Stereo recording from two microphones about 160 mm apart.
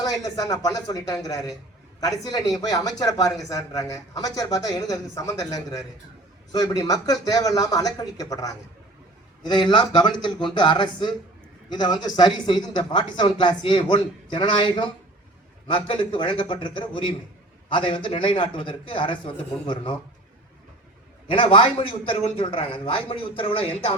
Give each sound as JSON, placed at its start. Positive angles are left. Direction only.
{"t": 0.0, "sound": "a man's voice", "side_deg": 20}
{"t": 21.2, "sound": "a man's voice", "side_deg": 35}